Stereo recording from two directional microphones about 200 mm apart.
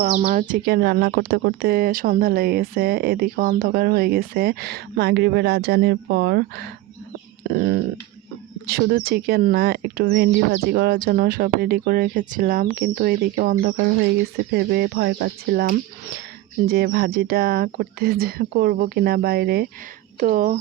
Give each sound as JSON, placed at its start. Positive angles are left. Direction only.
{"t": 0.0, "sound": "speech", "side_deg": -35}
{"t": 7.5, "sound": "a sound", "side_deg": -55}
{"t": 8.6, "sound": "speech", "side_deg": -50}
{"t": 20.1, "sound": "speech", "side_deg": -40}